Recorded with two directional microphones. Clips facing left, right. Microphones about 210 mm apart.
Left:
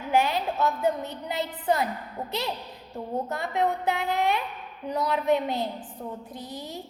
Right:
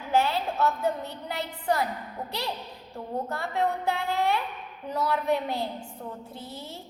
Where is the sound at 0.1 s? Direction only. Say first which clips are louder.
Left 1 dB; 15° left (ahead or behind).